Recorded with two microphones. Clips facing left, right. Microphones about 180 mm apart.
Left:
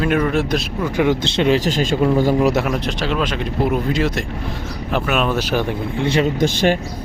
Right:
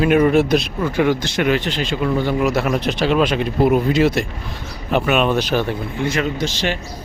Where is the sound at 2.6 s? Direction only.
5° right (ahead or behind).